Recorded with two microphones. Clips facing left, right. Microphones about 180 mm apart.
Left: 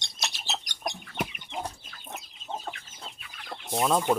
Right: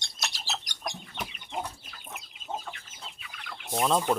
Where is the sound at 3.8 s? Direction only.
5° left (ahead or behind).